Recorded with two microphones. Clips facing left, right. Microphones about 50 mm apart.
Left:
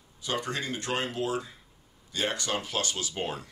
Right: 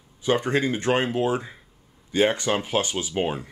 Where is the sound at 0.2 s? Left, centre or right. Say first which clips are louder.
Right 10 dB; right.